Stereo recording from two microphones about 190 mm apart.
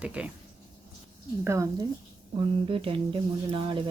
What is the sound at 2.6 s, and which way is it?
A woman's voice, 30° right (ahead or behind).